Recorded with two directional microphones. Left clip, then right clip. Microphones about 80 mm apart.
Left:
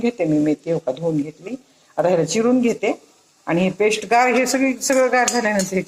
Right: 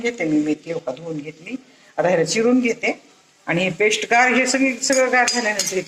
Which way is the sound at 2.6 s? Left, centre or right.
Left.